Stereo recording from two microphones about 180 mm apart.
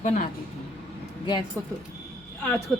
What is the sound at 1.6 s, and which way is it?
Speech, 15° right (ahead or behind).